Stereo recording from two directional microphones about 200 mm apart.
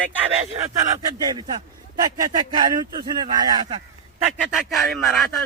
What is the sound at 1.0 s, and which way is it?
Speech, 20° right (ahead or behind).